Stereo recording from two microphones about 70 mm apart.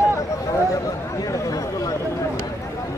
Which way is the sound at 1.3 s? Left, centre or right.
Left.